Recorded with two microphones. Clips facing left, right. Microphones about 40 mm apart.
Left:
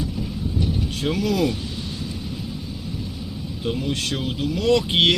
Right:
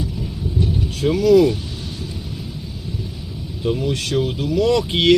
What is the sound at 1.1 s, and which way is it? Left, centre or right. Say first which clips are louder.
Speech: right 10 dB; left.